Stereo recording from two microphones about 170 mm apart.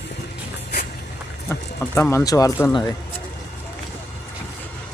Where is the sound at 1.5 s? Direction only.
15° left (ahead or behind).